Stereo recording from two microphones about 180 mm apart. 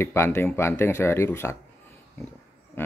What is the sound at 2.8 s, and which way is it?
Speech, 10° left (ahead or behind).